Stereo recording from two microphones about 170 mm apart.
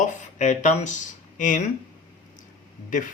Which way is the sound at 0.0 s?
45° left (ahead or behind).